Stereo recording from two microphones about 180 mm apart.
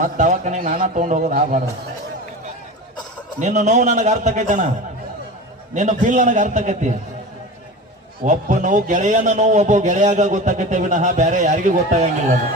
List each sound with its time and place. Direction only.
0.0 s a man's voice: 45° right (ahead or behind)
3.4 s a man's voice: 40° right (ahead or behind)
5.7 s a man's voice: 45° right (ahead or behind)
8.2 s a man's voice: 45° right (ahead or behind)